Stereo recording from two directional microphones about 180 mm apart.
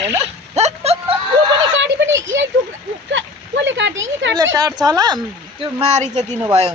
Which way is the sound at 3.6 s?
90° right.